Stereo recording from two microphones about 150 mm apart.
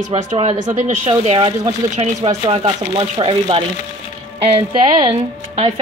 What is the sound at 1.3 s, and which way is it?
Speech, 30° right (ahead or behind).